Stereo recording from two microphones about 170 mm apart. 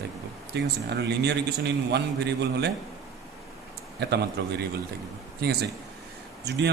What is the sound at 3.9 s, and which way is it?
A man's voice, 75° right (ahead or behind).